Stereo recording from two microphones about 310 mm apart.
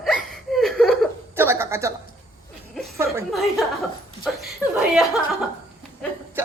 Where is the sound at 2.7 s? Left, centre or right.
Centre.